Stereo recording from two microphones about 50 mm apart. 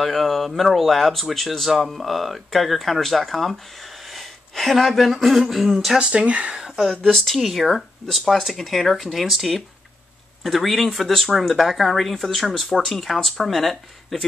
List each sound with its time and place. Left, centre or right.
0.0 s speech: centre
5.9 s speech: right
6.8 s speech: centre